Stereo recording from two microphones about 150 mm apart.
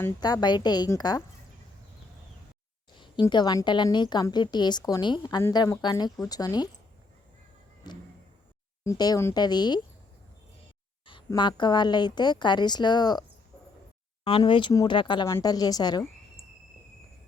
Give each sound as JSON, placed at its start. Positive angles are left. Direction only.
{"t": 0.2, "sound": "a woman's voice", "side_deg": 25}
{"t": 3.0, "sound": "a woman's voice", "side_deg": 30}
{"t": 7.9, "sound": "a woman's voice", "side_deg": 30}
{"t": 11.3, "sound": "a woman's voice", "side_deg": 30}
{"t": 14.3, "sound": "a woman's voice", "side_deg": 35}